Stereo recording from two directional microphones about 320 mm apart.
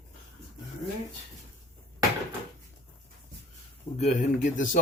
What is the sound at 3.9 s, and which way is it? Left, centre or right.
Speech, left.